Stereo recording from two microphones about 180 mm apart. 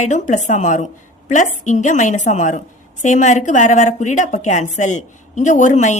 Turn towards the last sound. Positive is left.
turn(degrees=40)  # may be behind; listen again after turning